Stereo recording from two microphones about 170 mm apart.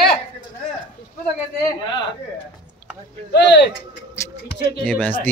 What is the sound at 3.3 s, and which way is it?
Speech, 90° left.